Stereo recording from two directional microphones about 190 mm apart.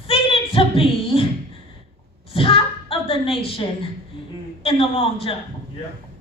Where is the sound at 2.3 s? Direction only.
30° left (ahead or behind).